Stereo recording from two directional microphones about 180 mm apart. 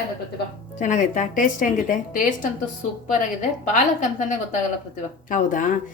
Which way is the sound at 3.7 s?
45° left (ahead or behind).